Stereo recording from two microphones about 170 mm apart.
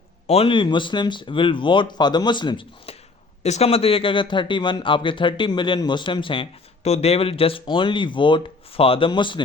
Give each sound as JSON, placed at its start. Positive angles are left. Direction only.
{"t": 0.3, "sound": "speech", "side_deg": 35}
{"t": 3.4, "sound": "speech", "side_deg": 40}